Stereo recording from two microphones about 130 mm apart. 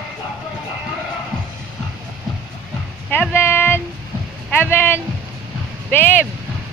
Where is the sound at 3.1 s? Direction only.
15° left (ahead or behind).